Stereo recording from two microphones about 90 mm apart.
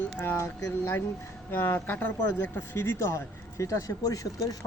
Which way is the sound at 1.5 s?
25° left (ahead or behind).